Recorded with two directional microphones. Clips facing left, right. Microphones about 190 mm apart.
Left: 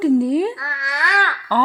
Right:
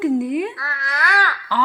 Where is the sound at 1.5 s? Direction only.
45° left (ahead or behind).